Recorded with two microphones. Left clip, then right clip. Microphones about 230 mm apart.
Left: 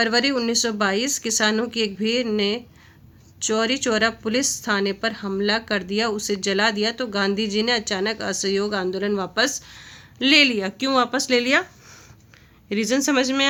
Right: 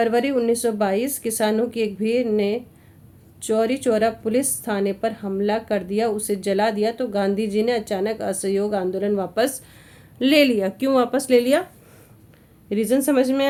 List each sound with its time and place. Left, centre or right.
0.0 s speech: centre
12.6 s speech: centre